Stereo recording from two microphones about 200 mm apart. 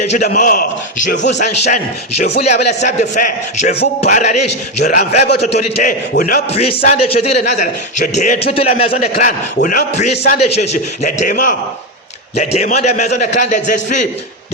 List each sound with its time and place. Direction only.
0.2 s a man's voice: 40° left (ahead or behind)
6.5 s speech: 30° left (ahead or behind)
8.9 s speech: 40° left (ahead or behind)